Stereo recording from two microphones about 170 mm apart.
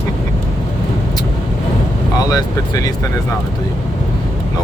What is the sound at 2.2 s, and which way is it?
Speech, 20° left (ahead or behind).